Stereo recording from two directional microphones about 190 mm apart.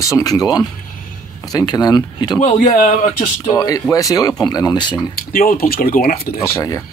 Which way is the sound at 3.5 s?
20° left (ahead or behind).